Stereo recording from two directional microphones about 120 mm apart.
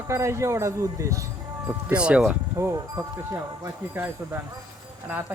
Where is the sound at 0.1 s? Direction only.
25° right (ahead or behind).